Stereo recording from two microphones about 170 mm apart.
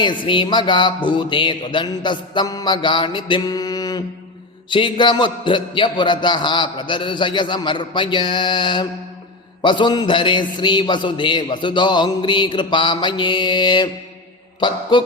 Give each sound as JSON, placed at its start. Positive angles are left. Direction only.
{"t": 0.0, "sound": "a man's voice", "side_deg": 30}